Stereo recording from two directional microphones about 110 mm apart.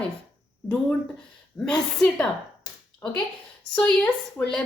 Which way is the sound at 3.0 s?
20° left (ahead or behind).